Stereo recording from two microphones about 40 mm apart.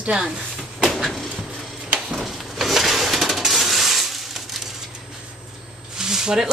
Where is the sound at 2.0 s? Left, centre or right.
Centre.